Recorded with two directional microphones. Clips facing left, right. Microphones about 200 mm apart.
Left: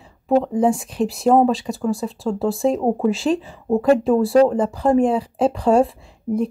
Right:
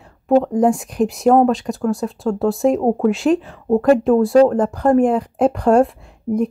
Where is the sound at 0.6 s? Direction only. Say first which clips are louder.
Right 2 dB; centre (ahead or behind).